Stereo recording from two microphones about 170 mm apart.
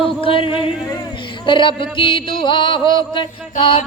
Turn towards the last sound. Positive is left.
turn(degrees=30)  # may be behind; listen again after turning